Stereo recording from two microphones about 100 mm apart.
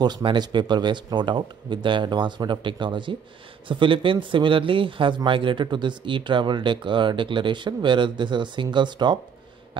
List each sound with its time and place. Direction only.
0.0 s speech: 50° right (ahead or behind)